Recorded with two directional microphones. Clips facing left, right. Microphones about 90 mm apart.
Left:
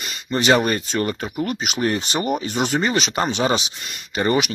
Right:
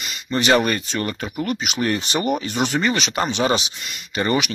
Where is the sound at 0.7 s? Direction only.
30° left (ahead or behind).